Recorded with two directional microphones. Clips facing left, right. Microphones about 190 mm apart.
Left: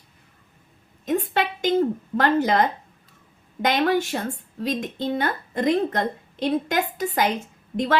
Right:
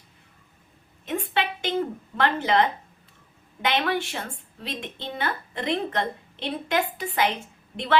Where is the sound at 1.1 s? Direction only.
40° left (ahead or behind).